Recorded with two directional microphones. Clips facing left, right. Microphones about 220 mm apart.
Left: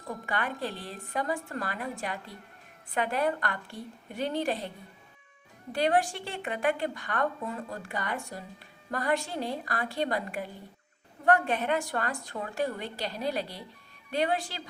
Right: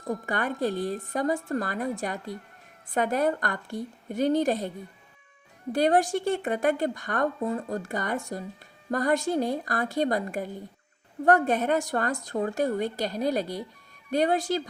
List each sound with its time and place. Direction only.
0.3 s a woman's voice: 45° right (ahead or behind)
5.7 s a woman's voice: 45° right (ahead or behind)